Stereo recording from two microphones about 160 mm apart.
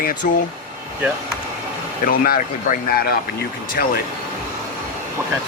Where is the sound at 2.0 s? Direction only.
65° left (ahead or behind).